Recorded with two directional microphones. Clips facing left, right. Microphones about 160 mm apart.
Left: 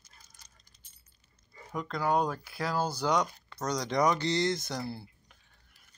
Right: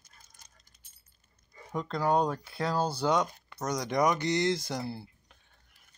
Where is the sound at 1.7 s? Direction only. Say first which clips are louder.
Right 2 dB; 30° right (ahead or behind).